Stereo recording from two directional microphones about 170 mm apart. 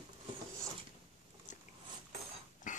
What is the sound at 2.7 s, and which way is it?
Mechanisms, 50° left (ahead or behind).